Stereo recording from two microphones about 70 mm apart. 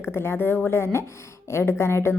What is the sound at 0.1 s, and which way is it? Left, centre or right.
Speech, left.